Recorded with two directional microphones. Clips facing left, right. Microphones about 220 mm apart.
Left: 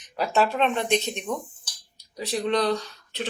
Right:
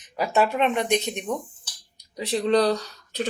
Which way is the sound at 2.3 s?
30° right (ahead or behind).